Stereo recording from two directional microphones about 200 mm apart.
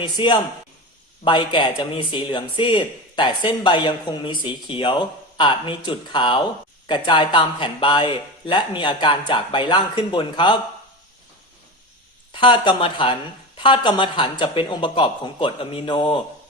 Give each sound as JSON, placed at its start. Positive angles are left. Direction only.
{"t": 0.0, "sound": "a man's voice", "side_deg": 25}
{"t": 12.3, "sound": "a man's voice", "side_deg": 25}